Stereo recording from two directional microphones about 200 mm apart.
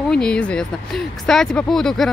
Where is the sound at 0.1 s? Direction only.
5° left (ahead or behind).